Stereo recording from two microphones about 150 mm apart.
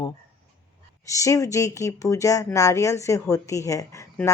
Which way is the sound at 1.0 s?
20° left (ahead or behind).